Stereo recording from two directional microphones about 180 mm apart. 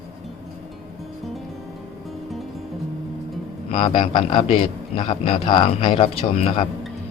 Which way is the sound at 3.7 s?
30° left (ahead or behind).